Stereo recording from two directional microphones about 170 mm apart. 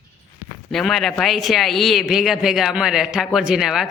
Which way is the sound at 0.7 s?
Centre (ahead or behind).